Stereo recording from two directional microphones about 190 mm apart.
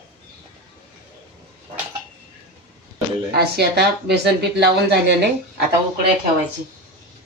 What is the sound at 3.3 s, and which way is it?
Speech, 55° right (ahead or behind).